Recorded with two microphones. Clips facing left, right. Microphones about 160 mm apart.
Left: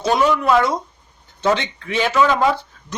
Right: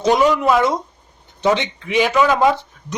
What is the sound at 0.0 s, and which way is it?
A woman's voice, 15° right (ahead or behind).